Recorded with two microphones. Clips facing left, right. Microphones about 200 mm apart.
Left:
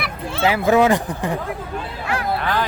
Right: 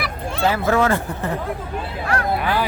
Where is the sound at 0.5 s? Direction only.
15° left (ahead or behind).